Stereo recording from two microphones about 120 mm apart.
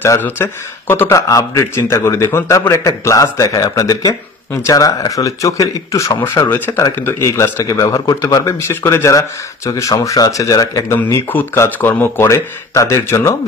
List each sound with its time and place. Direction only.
0.0 s speech: 20° left (ahead or behind)